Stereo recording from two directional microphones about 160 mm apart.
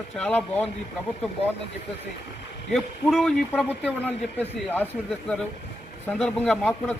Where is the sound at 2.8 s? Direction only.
Centre (ahead or behind).